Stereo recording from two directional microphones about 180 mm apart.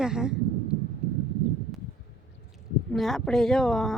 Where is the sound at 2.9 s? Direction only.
Centre (ahead or behind).